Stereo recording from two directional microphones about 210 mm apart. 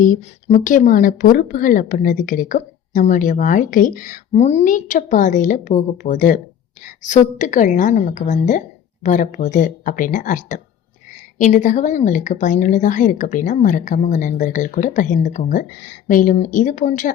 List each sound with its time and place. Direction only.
0.0 s speech: 35° left (ahead or behind)